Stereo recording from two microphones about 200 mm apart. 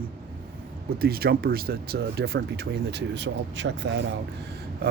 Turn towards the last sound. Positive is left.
turn(degrees=-65)  # may be behind; listen again after turning